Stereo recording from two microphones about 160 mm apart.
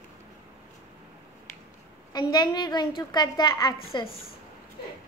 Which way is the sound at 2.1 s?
25° left (ahead or behind).